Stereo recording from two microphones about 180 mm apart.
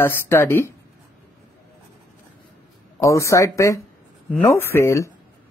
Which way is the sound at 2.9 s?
15° left (ahead or behind).